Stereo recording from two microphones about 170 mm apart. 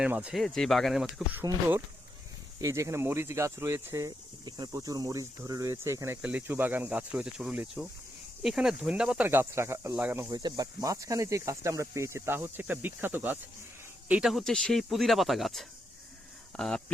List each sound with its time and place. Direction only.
0.0 s speech: 5° right (ahead or behind)
2.6 s speech: 20° right (ahead or behind)
10.2 s speech: 25° right (ahead or behind); by 16.8 s centre (ahead or behind)